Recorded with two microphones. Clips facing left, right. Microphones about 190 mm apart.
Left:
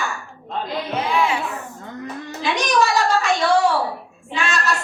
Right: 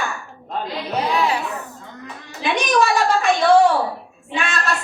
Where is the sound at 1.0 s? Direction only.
40° right (ahead or behind).